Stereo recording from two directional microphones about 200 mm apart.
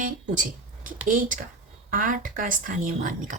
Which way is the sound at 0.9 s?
40° right (ahead or behind).